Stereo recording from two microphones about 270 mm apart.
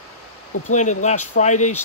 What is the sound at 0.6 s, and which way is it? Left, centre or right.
Speech, left.